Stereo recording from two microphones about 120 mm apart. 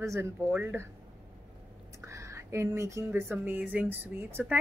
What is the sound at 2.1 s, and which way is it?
A woman's voice, 25° right (ahead or behind).